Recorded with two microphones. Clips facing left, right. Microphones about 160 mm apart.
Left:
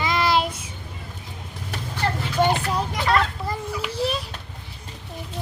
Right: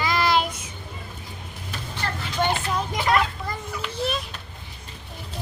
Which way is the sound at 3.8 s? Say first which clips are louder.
Left 2 dB; 35° left (ahead or behind).